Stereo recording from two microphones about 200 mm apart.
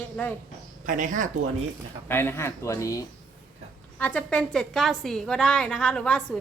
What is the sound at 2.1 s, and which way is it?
A woman's voice, 10° left (ahead or behind).